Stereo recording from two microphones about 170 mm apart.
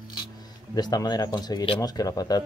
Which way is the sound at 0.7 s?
25° left (ahead or behind).